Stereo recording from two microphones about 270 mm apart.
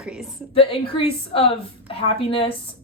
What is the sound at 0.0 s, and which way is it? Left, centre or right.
Speech, centre.